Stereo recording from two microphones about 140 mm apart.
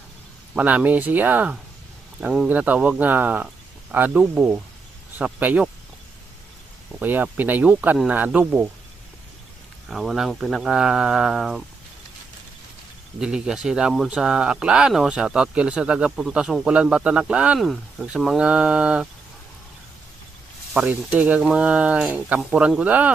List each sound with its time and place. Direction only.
0.5 s speech: 10° right (ahead or behind)
7.0 s speech: 15° right (ahead or behind)
9.9 s speech: centre (ahead or behind)
13.1 s speech: 5° right (ahead or behind)
20.7 s speech: 10° right (ahead or behind)